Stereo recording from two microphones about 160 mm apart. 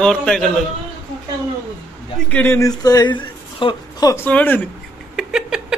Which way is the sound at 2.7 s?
25° left (ahead or behind).